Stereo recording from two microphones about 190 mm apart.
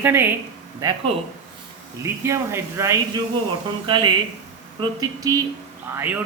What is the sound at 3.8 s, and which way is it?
Speech, 25° right (ahead or behind).